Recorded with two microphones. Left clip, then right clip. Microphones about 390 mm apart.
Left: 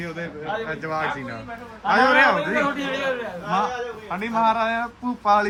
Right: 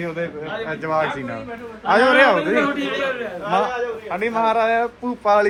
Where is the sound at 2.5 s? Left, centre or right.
Left.